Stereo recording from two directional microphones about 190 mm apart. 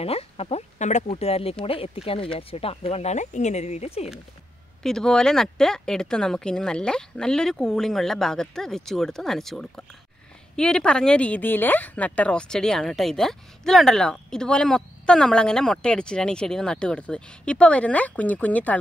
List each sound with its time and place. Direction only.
0.0 s speech: 30° left (ahead or behind)
4.8 s a woman's voice: 5° left (ahead or behind)